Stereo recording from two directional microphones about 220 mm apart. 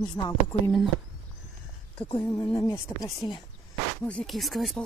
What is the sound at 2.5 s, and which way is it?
Speech, 15° left (ahead or behind).